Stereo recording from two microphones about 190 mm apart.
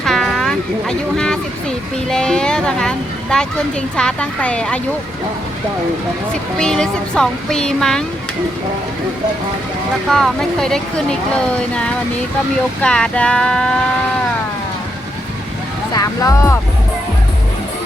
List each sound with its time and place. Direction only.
0.0 s a sound: centre (ahead or behind)
2.0 s speech: 5° left (ahead or behind)
6.6 s speech: 5° left (ahead or behind)
10.1 s speech: centre (ahead or behind)
16.0 s speech: 15° left (ahead or behind)